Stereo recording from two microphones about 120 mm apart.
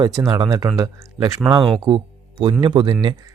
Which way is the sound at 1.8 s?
45° right (ahead or behind).